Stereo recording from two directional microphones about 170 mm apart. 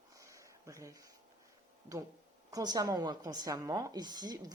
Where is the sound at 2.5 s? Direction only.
20° right (ahead or behind).